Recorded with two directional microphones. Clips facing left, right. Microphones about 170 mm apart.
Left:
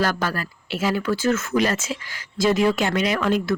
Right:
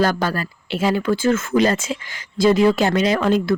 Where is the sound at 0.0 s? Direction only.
30° right (ahead or behind).